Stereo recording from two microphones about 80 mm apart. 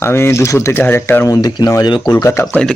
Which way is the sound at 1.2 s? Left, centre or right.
Left.